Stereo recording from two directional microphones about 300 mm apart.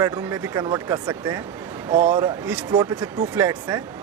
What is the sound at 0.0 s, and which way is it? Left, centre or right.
Speech, centre.